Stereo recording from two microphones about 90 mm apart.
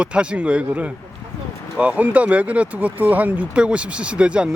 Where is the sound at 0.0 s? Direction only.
10° right (ahead or behind).